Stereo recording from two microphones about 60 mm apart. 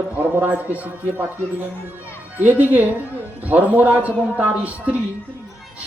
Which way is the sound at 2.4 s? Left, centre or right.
Right.